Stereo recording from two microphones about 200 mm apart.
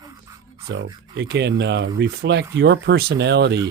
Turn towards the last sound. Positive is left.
turn(degrees=-60)  # may be behind; listen again after turning